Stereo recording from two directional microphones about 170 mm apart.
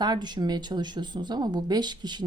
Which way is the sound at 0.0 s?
25° right (ahead or behind).